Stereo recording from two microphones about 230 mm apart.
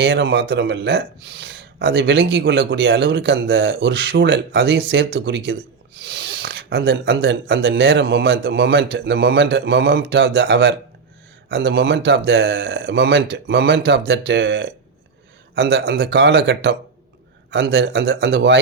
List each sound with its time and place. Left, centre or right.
0.0 s a man's voice: right